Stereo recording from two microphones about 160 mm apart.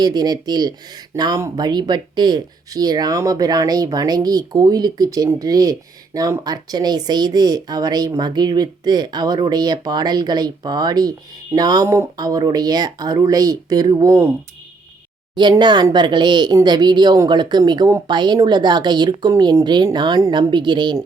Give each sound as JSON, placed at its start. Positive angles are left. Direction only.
{"t": 0.0, "sound": "speech", "side_deg": -25}
{"t": 15.4, "sound": "speech", "side_deg": -30}